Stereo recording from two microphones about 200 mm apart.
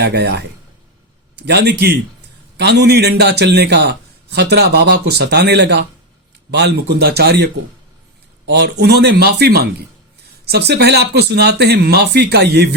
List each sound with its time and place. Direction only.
0.0 s a man's voice: 55° right (ahead or behind)